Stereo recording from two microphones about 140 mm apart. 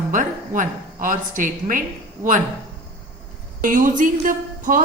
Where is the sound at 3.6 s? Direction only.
75° right (ahead or behind).